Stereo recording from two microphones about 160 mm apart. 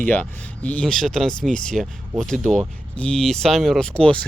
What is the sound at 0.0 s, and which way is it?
Speech, 10° left (ahead or behind).